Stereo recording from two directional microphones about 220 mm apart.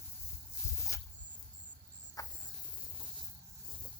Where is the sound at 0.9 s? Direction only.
15° left (ahead or behind).